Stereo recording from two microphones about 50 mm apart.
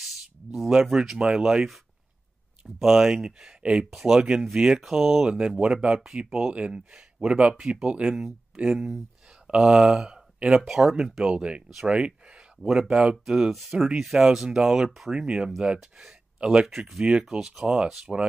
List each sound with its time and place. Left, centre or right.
0.6 s speech: centre
10.6 s speech: centre
11.2 s speech: right
16.6 s speech: centre